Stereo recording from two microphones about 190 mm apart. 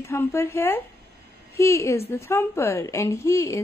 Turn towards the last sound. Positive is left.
turn(degrees=15)  # may be behind; listen again after turning